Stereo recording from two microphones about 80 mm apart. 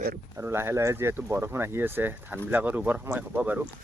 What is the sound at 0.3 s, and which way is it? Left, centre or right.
Speech, right.